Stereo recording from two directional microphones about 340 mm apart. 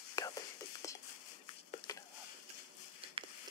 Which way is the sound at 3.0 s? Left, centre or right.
Centre.